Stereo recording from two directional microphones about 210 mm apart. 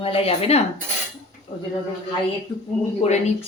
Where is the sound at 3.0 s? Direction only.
30° left (ahead or behind).